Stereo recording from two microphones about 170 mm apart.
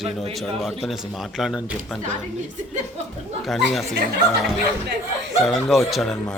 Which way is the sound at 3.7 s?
Centre (ahead or behind).